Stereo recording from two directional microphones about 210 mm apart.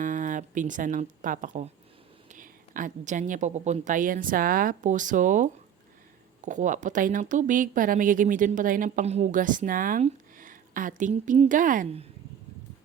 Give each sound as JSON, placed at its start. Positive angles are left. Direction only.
{"t": 0.0, "sound": "speech", "side_deg": -40}